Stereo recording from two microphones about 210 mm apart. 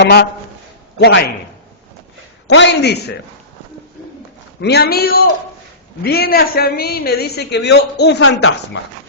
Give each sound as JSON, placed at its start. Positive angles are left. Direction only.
{"t": 0.0, "sound": "a woman's voice", "side_deg": 50}
{"t": 2.5, "sound": "a man's voice", "side_deg": 55}
{"t": 4.6, "sound": "a woman's voice", "side_deg": 50}